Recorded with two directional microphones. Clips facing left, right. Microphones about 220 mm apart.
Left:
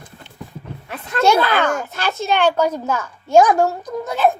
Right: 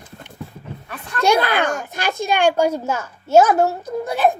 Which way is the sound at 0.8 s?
25° left (ahead or behind).